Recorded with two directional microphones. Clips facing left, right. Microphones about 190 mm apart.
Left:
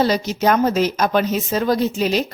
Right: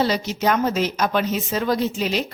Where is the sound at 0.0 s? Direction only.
40° left (ahead or behind).